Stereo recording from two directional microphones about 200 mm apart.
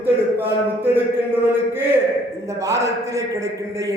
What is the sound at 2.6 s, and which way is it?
A man's voice, 15° right (ahead or behind).